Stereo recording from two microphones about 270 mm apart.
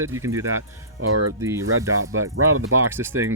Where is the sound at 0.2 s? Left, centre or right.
Centre.